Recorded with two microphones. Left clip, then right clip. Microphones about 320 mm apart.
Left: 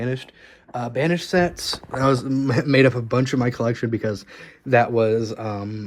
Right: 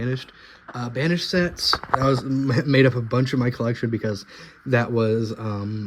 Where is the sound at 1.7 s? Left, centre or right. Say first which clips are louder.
Right 7 dB; left.